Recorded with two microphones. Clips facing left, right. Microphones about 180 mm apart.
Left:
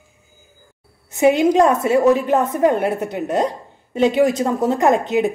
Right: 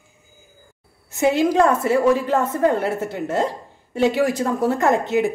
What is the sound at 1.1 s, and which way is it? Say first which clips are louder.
A woman's voice: left 4 dB; 20° left (ahead or behind).